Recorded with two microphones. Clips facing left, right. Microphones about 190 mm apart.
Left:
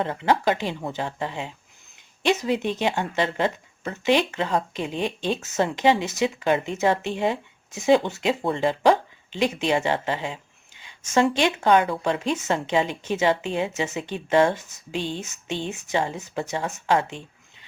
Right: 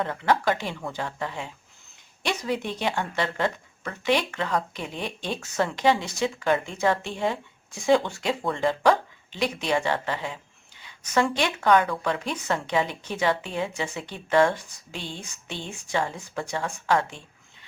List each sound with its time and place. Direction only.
0.0 s speech: 20° left (ahead or behind)